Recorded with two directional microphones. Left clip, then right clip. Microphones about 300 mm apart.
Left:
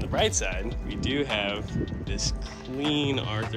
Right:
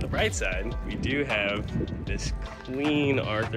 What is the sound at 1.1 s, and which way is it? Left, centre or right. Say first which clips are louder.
Speech: right 1 dB; centre.